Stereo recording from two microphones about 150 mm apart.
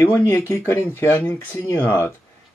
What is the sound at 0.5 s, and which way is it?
Speech, 20° left (ahead or behind).